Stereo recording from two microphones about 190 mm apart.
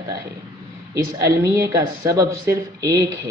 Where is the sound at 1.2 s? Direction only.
15° right (ahead or behind).